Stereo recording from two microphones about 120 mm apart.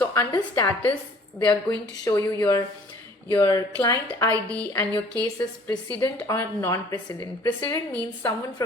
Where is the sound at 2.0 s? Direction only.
25° left (ahead or behind).